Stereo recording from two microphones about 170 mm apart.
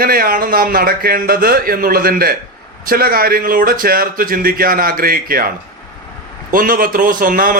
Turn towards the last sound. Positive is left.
turn(degrees=-55)  # may be behind; listen again after turning